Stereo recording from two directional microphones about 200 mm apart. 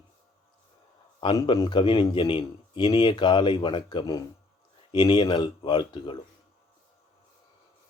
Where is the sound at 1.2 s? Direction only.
20° left (ahead or behind).